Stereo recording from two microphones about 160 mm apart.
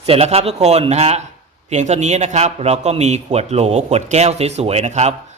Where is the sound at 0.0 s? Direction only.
40° right (ahead or behind).